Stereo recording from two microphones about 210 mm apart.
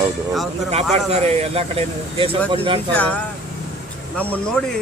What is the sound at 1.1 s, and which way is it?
Speech, 30° right (ahead or behind).